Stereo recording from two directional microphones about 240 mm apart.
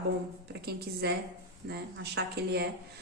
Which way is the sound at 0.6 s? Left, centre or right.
Right.